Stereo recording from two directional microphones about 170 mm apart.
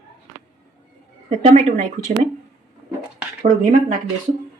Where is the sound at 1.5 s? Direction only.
40° right (ahead or behind).